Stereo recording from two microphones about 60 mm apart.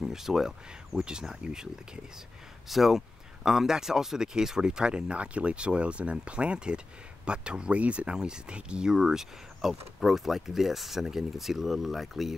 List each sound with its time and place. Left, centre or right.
0.0 s speech: centre
2.7 s speech: centre